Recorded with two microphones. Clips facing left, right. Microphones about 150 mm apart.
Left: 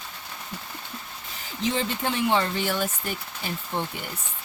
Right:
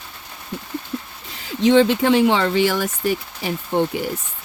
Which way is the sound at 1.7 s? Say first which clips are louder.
Right 13 dB; 90° right.